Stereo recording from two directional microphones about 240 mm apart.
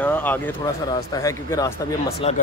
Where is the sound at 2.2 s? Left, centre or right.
Left.